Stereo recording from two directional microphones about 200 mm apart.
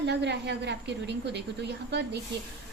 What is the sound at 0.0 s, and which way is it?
A woman's voice, 60° right (ahead or behind).